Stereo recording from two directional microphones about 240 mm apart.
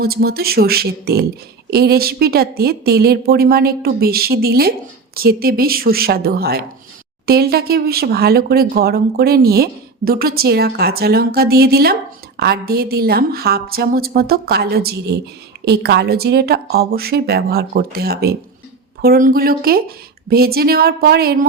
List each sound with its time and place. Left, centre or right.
0.0 s speech: right